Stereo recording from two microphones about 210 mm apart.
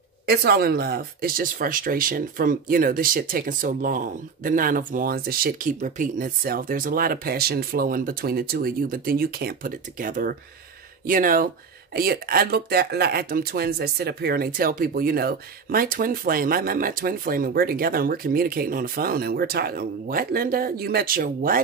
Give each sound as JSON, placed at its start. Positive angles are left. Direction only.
{"t": 0.3, "sound": "speech", "side_deg": -50}